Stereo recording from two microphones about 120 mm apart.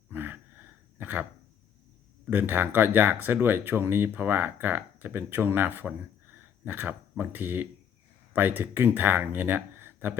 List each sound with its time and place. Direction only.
0.1 s gasp: 15° right (ahead or behind)
2.3 s speech: 15° right (ahead or behind)